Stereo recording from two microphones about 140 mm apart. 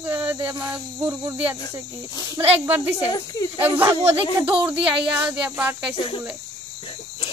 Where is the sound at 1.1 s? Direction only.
15° right (ahead or behind).